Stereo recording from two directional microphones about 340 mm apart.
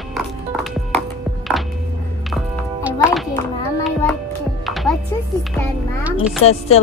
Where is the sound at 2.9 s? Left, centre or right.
Centre.